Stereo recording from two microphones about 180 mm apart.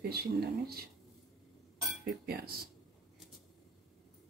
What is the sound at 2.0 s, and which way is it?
Speech, 60° right (ahead or behind).